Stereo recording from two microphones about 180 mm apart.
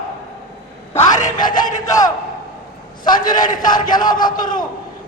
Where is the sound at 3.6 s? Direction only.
25° left (ahead or behind).